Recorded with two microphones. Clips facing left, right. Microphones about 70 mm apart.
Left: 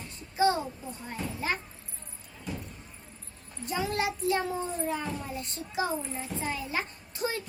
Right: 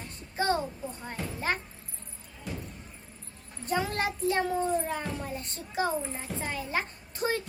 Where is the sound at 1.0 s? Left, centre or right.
Right.